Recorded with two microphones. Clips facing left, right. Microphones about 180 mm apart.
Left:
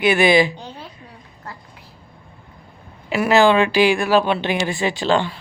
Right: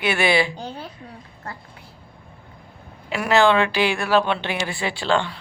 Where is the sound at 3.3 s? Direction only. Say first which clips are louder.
Left 2 dB; 15° left (ahead or behind).